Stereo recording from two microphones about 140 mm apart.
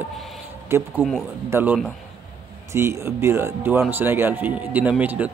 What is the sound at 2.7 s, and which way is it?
Speech, 20° right (ahead or behind).